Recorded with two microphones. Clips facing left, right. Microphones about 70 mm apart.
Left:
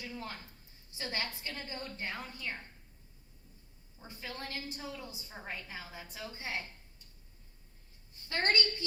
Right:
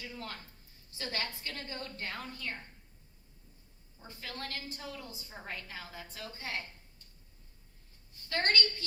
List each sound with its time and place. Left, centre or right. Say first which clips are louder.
0.2 s a woman's voice: even; centre
4.0 s a woman's voice: even; centre
8.3 s a woman's voice: even; centre